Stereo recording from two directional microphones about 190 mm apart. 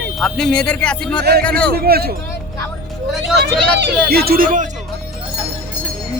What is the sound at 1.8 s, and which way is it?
Speech, 55° right (ahead or behind).